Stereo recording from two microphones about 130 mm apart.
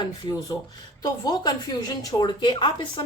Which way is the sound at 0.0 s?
30° left (ahead or behind).